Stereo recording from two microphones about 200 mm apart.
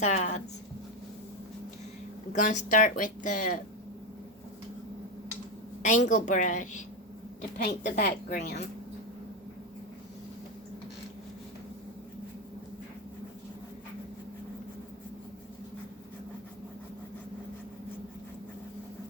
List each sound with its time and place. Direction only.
0.0 s speech: 35° left (ahead or behind)
2.3 s speech: 40° left (ahead or behind)
5.8 s speech: 40° left (ahead or behind)
7.7 s a woman's voice: 50° left (ahead or behind)